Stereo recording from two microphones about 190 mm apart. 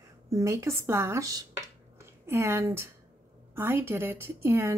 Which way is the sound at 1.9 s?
15° right (ahead or behind).